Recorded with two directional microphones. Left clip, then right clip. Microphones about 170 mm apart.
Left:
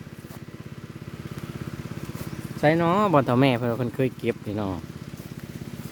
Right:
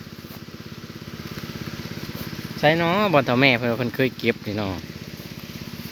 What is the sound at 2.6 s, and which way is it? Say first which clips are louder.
Speech: right 2 dB; 25° left (ahead or behind).